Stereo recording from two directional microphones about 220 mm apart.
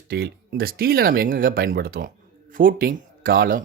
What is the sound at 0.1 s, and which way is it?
Speech, 45° right (ahead or behind).